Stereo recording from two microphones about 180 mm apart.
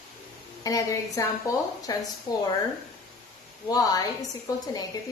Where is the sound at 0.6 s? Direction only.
20° left (ahead or behind).